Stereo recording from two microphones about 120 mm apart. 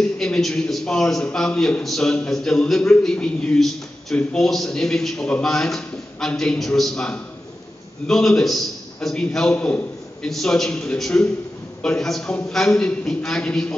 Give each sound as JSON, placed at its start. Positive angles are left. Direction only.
{"t": 0.2, "sound": "a man's voice", "side_deg": 5}